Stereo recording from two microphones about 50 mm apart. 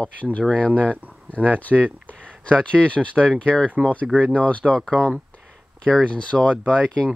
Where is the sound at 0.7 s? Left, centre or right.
Right.